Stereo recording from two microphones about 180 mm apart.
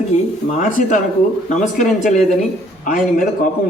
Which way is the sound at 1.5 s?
45° left (ahead or behind).